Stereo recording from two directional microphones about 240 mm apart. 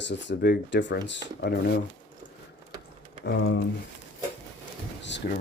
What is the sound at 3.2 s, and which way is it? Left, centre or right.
Speech, left.